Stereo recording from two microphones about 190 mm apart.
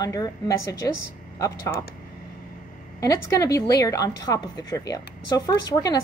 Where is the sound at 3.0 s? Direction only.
15° left (ahead or behind).